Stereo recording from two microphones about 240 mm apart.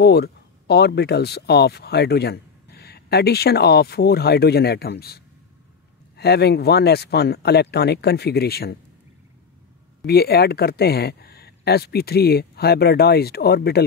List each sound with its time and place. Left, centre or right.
0.0 s speech: left
10.0 s speech: left